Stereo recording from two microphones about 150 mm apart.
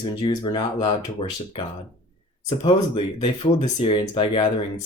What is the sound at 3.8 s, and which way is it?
Speech, 30° left (ahead or behind).